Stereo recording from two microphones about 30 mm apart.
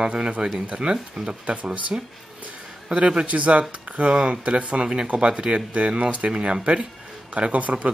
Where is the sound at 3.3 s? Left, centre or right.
Right.